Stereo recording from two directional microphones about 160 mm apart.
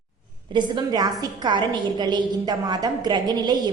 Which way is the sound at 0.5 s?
25° right (ahead or behind).